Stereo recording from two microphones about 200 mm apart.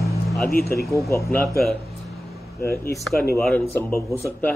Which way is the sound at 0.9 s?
15° left (ahead or behind).